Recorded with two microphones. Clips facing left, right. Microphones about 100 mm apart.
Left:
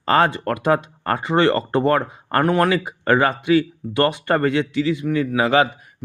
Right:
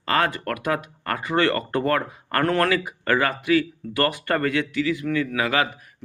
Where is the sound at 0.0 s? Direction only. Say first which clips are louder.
Left 5 dB; 30° left (ahead or behind).